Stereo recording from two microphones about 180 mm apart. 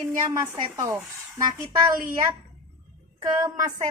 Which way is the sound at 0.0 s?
15° right (ahead or behind).